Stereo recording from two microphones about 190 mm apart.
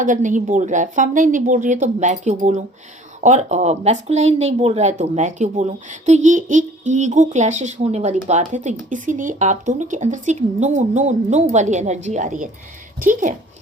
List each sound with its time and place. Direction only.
0.0 s speech: 45° right (ahead or behind)